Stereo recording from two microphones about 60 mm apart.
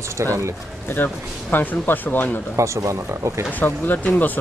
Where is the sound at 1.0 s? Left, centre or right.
Left.